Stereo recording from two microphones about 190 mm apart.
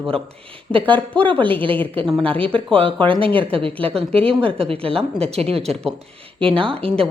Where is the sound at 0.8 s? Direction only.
10° left (ahead or behind).